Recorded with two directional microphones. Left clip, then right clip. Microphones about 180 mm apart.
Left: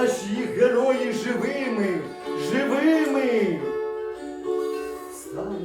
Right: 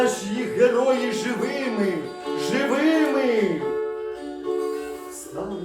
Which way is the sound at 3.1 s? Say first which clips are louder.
Right 1 dB; centre (ahead or behind).